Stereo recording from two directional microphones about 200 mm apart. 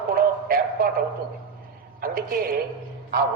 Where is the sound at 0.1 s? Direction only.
45° right (ahead or behind).